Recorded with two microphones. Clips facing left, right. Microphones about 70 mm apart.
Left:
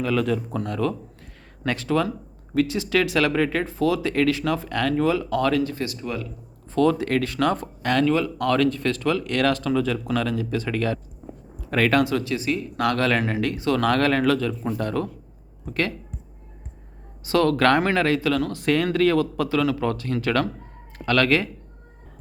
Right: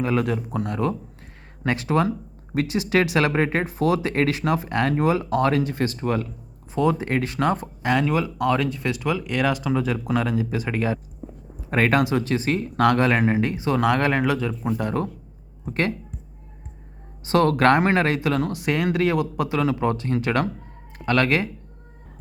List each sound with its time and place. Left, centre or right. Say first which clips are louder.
0.0 s speech: right 1 dB; right
0.3 s speech: left 1 dB; centre; by 6.2 s right
6.7 s speech: left 2 dB; centre
7.5 s speech: even; centre
11.6 s a sound: even; right
11.9 s speech: even; centre
12.2 s speech: right 2 dB; right
12.9 s speech: right 1 dB; right
15.6 s speech: right 2 dB; right
17.2 s speech: right 1 dB; right
18.5 s speech: left 1 dB; centre